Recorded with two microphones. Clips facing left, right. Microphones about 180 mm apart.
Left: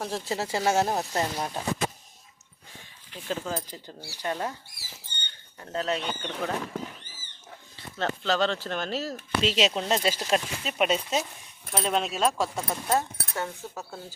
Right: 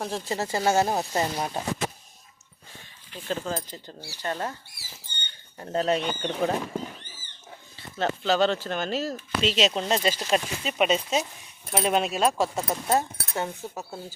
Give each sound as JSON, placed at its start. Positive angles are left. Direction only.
{"t": 0.1, "sound": "speech", "side_deg": 5}
{"t": 3.2, "sound": "speech", "side_deg": 5}
{"t": 5.5, "sound": "speech", "side_deg": -30}
{"t": 6.0, "sound": "speech", "side_deg": -10}
{"t": 6.4, "sound": "speech", "side_deg": -25}
{"t": 7.9, "sound": "speech", "side_deg": -10}
{"t": 11.7, "sound": "speech", "side_deg": -10}
{"t": 12.4, "sound": "speech", "side_deg": -20}